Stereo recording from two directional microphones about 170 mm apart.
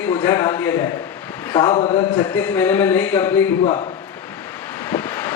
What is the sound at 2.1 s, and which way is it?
Speech, 10° left (ahead or behind).